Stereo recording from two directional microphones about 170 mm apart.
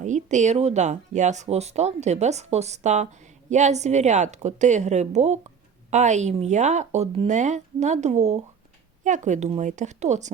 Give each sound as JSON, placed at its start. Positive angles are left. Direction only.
{"t": 0.0, "sound": "speech", "side_deg": -45}